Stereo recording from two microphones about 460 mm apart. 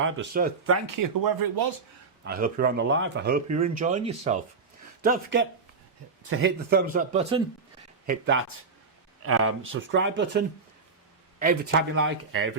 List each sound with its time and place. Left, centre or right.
0.0 s speech: right
0.9 s speech: right
2.2 s speech: centre